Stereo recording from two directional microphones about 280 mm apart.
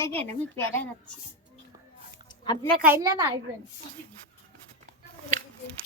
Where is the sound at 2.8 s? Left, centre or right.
Centre.